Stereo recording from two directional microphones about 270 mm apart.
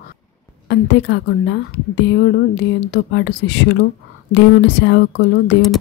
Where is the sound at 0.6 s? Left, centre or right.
Left.